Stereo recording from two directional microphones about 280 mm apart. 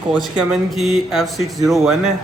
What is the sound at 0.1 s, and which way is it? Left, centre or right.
Speech, centre.